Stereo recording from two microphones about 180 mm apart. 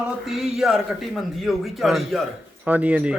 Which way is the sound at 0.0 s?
Centre (ahead or behind).